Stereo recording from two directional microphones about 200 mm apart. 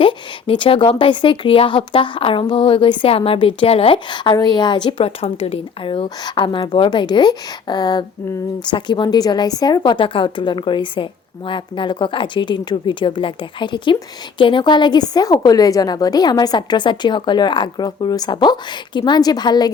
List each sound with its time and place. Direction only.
0.0 s speech: 25° left (ahead or behind)